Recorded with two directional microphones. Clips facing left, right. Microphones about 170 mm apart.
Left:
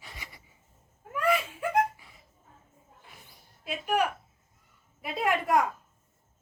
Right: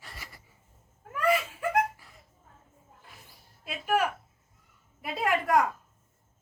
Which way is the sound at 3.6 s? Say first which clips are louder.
Even; centre (ahead or behind).